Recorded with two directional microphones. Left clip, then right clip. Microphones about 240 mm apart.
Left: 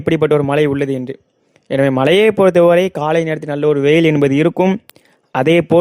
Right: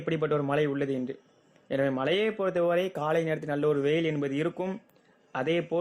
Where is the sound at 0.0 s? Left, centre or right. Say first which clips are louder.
Left 15 dB; left.